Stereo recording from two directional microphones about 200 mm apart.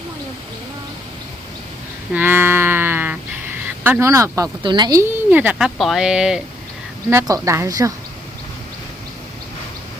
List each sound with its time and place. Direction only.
2.1 s a sound: 10° right (ahead or behind)
3.8 s speech: 10° right (ahead or behind)
7.1 s speech: 15° right (ahead or behind)